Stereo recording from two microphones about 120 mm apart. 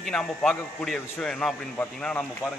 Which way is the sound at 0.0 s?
5° left (ahead or behind).